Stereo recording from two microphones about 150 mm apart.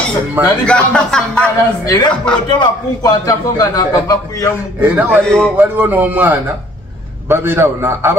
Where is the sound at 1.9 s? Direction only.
30° left (ahead or behind).